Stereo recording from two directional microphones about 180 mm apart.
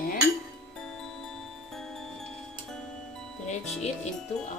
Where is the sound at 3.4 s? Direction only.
40° left (ahead or behind).